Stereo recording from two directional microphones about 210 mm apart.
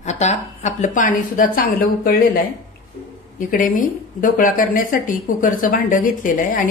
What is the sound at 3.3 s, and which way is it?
Speech, 40° left (ahead or behind).